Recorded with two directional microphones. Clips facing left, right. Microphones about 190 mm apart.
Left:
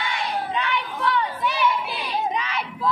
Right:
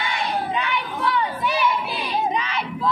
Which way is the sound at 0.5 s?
10° right (ahead or behind).